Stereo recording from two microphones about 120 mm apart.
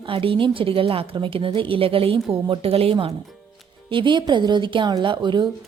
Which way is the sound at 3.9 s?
40° right (ahead or behind).